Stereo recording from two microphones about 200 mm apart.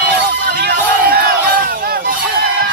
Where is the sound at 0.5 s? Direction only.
55° right (ahead or behind).